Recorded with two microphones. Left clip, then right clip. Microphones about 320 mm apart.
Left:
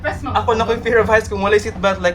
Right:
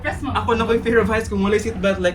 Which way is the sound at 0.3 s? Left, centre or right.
Centre.